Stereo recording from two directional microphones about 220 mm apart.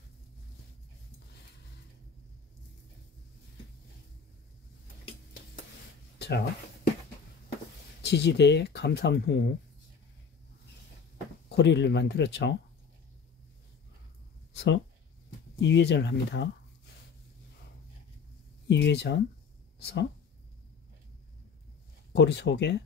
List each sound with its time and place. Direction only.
6.1 s a sound: 50° left (ahead or behind)
8.0 s speech: 50° left (ahead or behind)
11.4 s speech: 50° left (ahead or behind)
14.5 s a sound: 55° left (ahead or behind)
15.6 s speech: 55° left (ahead or behind)
18.7 s speech: 50° left (ahead or behind)
22.1 s speech: 50° left (ahead or behind)